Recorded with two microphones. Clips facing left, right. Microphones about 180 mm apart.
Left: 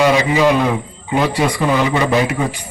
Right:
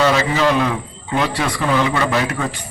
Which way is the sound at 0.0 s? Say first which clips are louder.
Left 3 dB; 15° left (ahead or behind).